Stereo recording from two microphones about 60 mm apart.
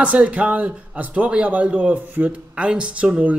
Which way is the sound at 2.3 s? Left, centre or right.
Centre.